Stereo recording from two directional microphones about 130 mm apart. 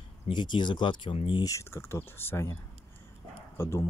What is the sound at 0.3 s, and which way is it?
Speech, 35° left (ahead or behind).